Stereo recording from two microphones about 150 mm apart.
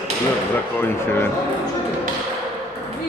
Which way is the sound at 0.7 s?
15° left (ahead or behind).